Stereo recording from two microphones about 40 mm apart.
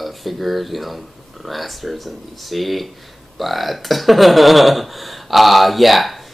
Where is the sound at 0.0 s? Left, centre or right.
Centre.